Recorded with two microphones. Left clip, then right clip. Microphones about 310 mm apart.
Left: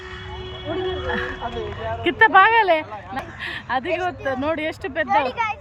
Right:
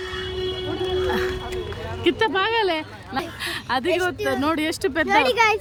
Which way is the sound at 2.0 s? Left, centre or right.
Centre.